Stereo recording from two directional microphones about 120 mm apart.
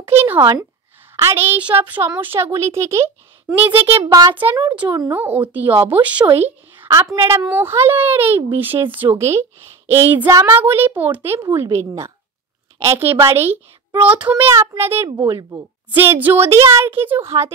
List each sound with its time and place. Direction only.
0.0 s a sound: 20° right (ahead or behind)
0.4 s speech: 35° right (ahead or behind)
1.1 s a woman's voice: 20° right (ahead or behind)
4.6 s speech: 40° right (ahead or behind)
5.1 s a woman's voice: 15° right (ahead or behind)
6.9 s a child's voice: 25° right (ahead or behind); by 14.3 s 10° right (ahead or behind)
14.3 s a child's voice: 20° right (ahead or behind)
15.0 s speech: 35° right (ahead or behind)
15.9 s a child's voice: 15° right (ahead or behind)